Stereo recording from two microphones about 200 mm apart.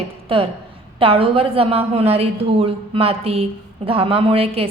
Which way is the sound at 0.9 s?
25° right (ahead or behind).